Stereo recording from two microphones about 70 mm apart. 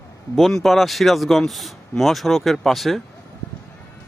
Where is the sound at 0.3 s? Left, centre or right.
Centre.